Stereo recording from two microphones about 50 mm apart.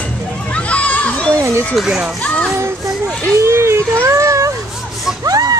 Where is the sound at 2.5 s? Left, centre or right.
Right.